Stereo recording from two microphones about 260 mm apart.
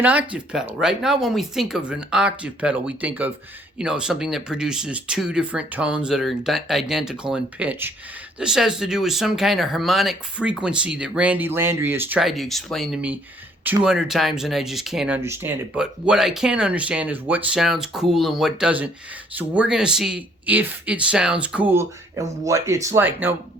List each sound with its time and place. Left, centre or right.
0.0 s speech: centre